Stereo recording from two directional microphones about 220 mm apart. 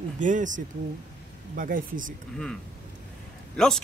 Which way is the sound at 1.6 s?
40° right (ahead or behind).